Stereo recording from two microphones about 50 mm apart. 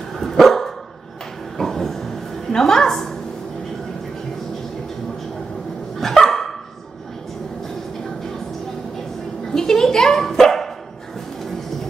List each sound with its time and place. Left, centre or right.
0.2 s dog: centre
5.9 s dog: centre
9.5 s dog: centre